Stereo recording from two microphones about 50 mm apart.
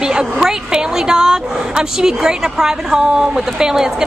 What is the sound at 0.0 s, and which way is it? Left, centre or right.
A woman's voice, centre.